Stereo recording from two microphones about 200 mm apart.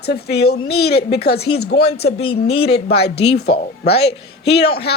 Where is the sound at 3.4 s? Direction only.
55° left (ahead or behind).